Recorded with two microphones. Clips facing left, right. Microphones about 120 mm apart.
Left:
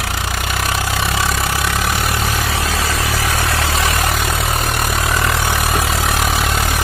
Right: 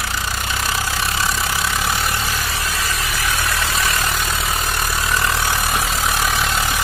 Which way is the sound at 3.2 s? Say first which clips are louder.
Left 3 dB; 80° left.